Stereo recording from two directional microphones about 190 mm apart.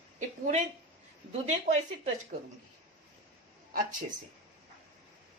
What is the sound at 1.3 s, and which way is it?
Speech, 35° right (ahead or behind).